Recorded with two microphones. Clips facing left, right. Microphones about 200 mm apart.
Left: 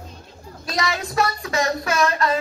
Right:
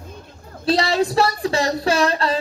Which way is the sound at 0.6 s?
30° right (ahead or behind).